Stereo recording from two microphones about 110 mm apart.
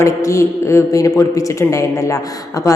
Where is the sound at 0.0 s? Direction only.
25° left (ahead or behind).